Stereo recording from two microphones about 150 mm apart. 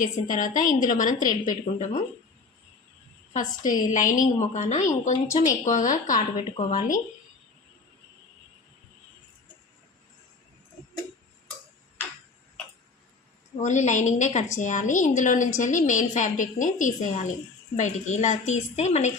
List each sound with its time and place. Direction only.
0.3 s a woman's voice: 60° left (ahead or behind)
3.3 s a woman's voice: 60° left (ahead or behind)
13.6 s a woman's voice: 55° left (ahead or behind)